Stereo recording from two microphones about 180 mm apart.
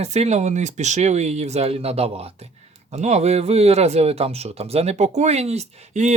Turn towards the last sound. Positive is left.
turn(degrees=-40)  # may be behind; listen again after turning